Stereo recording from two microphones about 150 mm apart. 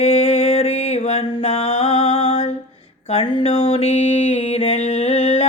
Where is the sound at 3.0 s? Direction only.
40° left (ahead or behind).